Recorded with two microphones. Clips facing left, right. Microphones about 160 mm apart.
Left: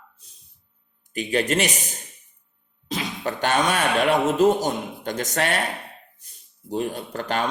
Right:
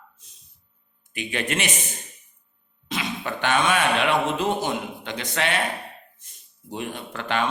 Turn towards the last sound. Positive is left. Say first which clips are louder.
# left 1 dB
turn(degrees=40)  # may be behind; listen again after turning